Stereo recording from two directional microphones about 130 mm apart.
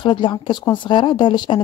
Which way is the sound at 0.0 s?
35° left (ahead or behind).